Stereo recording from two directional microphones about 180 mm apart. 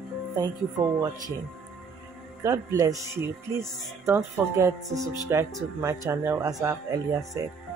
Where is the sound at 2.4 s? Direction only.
15° right (ahead or behind).